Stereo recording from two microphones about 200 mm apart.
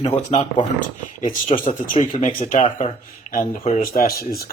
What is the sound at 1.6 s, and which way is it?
Speech, 40° left (ahead or behind).